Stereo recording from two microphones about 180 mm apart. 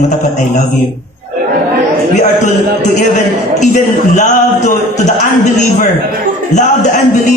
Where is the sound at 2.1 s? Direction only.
40° left (ahead or behind).